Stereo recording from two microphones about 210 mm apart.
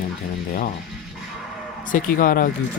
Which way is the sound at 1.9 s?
40° left (ahead or behind).